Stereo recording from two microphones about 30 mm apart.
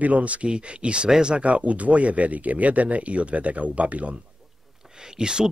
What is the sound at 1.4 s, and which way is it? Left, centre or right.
Speech, right.